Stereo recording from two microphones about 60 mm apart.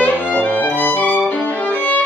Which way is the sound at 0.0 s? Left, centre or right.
Left.